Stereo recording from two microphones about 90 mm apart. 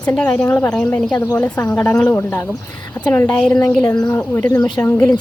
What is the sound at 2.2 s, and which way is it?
Speech, 30° left (ahead or behind).